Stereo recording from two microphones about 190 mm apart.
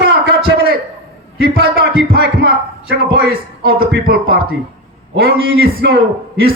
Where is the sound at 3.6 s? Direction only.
55° right (ahead or behind).